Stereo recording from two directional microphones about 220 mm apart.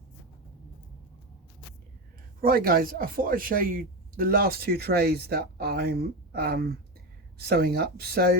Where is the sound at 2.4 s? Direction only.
40° right (ahead or behind).